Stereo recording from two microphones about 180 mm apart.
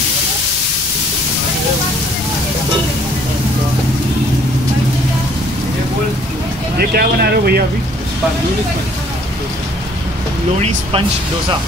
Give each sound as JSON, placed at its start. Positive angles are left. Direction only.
{"t": 6.8, "sound": "speech", "side_deg": -60}
{"t": 10.6, "sound": "speech", "side_deg": -30}